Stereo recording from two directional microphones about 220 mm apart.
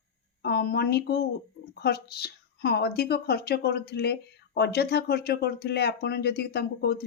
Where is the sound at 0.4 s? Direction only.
45° left (ahead or behind).